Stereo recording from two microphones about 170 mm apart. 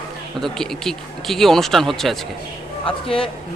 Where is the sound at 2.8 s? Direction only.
35° left (ahead or behind).